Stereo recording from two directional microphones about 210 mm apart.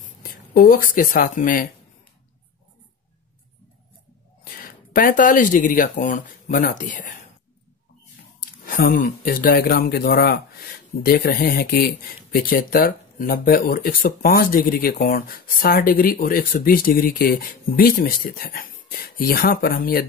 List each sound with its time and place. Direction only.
0.6 s speech: 40° left (ahead or behind)
4.6 s speech: 40° left (ahead or behind)
8.4 s speech: 40° left (ahead or behind)